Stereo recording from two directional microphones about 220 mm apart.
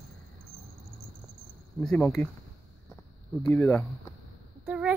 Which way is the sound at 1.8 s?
5° left (ahead or behind).